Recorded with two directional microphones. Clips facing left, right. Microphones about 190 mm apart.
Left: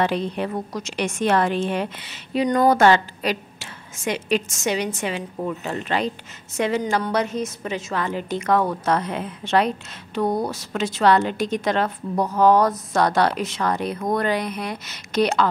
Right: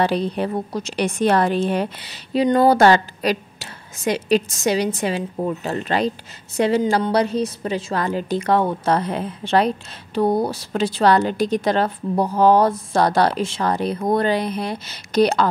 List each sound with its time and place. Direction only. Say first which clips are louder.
0.0 s a woman's voice: right 3 dB; 35° right (ahead or behind)